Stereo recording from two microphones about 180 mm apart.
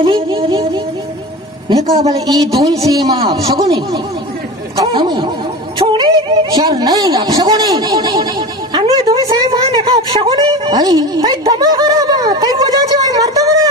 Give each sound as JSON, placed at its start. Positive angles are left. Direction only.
{"t": 0.0, "sound": "speech", "side_deg": -30}
{"t": 1.7, "sound": "speech", "side_deg": -20}